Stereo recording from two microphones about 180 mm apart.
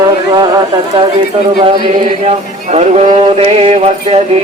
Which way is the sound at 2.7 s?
35° right (ahead or behind).